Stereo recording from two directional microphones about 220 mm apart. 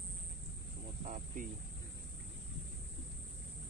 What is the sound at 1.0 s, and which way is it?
Cricket, 35° right (ahead or behind).